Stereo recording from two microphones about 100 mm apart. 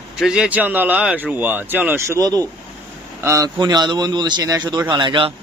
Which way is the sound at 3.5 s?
45° right (ahead or behind).